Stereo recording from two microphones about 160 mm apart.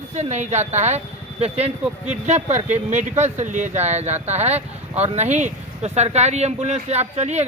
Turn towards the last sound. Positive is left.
turn(degrees=-45)  # may be behind; listen again after turning